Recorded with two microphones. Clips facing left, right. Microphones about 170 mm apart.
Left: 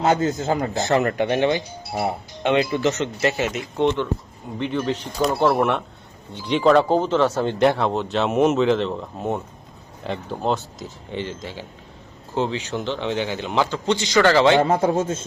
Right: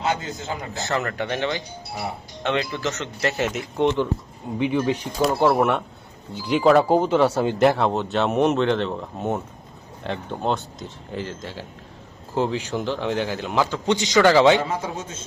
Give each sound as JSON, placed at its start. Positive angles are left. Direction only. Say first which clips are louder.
{"t": 0.0, "sound": "a man's voice", "louder": "left 7 dB", "side_deg": 45}
{"t": 0.7, "sound": "speech", "louder": "left 6 dB", "side_deg": 15}
{"t": 3.8, "sound": "speech", "louder": "even", "side_deg": -15}
{"t": 5.5, "sound": "speech", "louder": "even", "side_deg": 0}
{"t": 13.8, "sound": "speech", "louder": "right 1 dB", "side_deg": -20}
{"t": 14.5, "sound": "a man's voice", "louder": "left 6 dB", "side_deg": 55}